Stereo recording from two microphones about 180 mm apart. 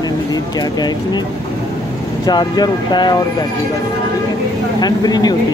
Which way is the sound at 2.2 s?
20° left (ahead or behind).